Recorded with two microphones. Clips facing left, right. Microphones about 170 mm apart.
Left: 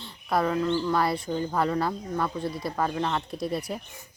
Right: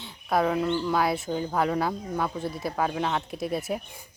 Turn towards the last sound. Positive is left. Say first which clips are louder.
# right 1 dB
turn(degrees=0)  # may be behind; listen again after turning